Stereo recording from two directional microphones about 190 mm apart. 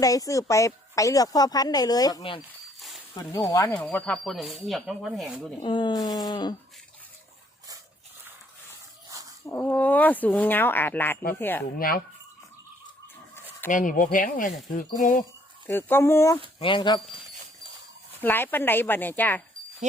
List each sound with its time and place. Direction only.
0.0 s speech: 20° left (ahead or behind)
3.8 s speech: 5° left (ahead or behind)
5.6 s speech: 25° left (ahead or behind)
9.5 s speech: 10° left (ahead or behind)
11.8 s speech: 50° left (ahead or behind)
13.7 s speech: 45° left (ahead or behind)
15.6 s speech: 10° left (ahead or behind)
16.6 s speech: 25° left (ahead or behind)
18.2 s speech: 10° left (ahead or behind)
19.8 s speech: 40° right (ahead or behind)